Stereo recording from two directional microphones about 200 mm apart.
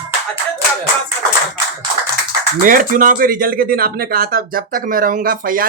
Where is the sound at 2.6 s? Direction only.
40° right (ahead or behind).